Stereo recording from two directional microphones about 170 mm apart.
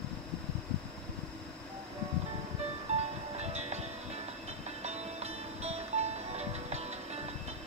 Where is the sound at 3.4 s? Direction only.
40° right (ahead or behind).